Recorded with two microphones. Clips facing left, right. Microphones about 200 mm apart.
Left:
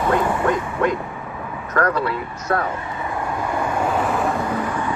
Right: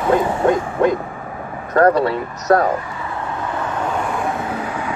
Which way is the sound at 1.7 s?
35° right (ahead or behind).